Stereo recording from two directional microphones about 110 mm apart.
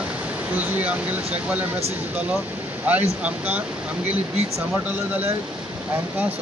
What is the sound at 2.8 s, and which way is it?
Speech, 15° right (ahead or behind).